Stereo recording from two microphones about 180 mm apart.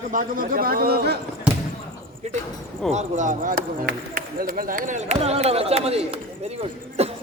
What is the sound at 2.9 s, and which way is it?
Speech, 40° right (ahead or behind).